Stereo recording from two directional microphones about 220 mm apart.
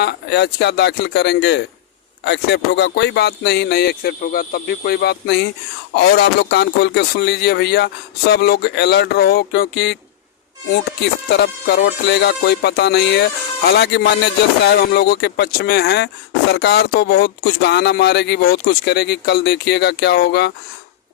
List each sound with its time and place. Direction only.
0.0 s speech: 50° left (ahead or behind)
11.3 s speech: 50° left (ahead or behind)